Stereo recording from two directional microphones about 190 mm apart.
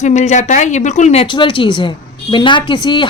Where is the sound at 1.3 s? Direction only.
25° left (ahead or behind).